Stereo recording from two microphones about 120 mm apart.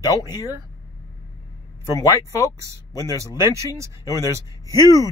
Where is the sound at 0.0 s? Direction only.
30° left (ahead or behind).